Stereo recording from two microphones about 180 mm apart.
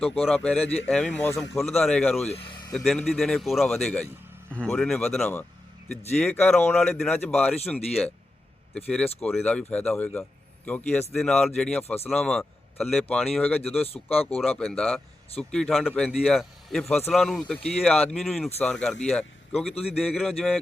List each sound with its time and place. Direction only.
0.0 s a man's voice: centre (ahead or behind)
13.8 s speech: 35° left (ahead or behind)
14.3 s a man's voice: 5° left (ahead or behind)